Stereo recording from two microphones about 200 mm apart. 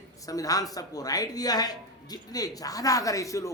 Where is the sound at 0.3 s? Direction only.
15° left (ahead or behind).